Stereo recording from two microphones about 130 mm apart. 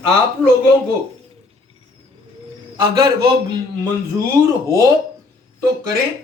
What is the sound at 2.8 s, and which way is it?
Speech, 35° right (ahead or behind).